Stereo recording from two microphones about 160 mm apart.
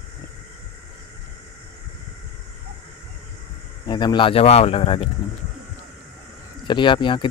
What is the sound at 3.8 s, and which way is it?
Speech, 25° left (ahead or behind).